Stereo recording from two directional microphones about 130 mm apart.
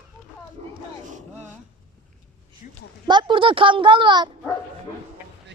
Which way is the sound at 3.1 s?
35° right (ahead or behind).